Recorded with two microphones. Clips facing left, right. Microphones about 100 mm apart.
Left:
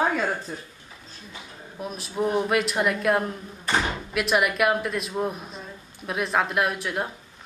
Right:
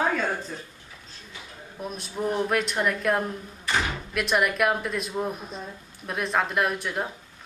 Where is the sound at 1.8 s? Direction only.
Centre (ahead or behind).